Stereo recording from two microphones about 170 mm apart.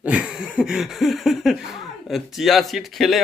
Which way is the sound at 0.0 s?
5° right (ahead or behind).